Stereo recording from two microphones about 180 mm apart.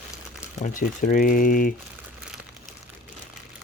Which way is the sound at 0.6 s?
45° left (ahead or behind).